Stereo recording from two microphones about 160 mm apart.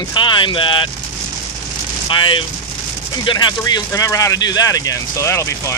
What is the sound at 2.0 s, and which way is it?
Speech, 30° left (ahead or behind).